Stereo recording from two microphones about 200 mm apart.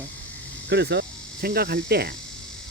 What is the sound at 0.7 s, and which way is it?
Speech, 55° right (ahead or behind).